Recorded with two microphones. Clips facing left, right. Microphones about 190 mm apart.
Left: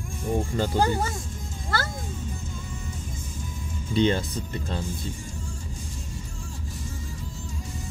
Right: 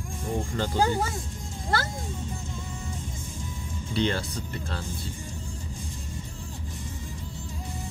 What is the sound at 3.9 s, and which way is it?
Speech, 20° left (ahead or behind).